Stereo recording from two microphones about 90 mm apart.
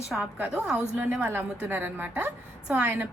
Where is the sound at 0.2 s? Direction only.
15° right (ahead or behind).